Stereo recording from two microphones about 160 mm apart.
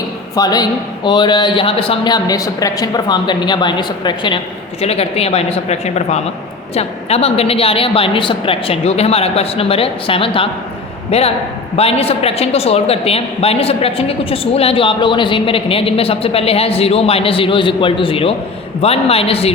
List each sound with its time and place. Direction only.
0.3 s a man's voice: 25° left (ahead or behind)
4.8 s a man's voice: 40° left (ahead or behind)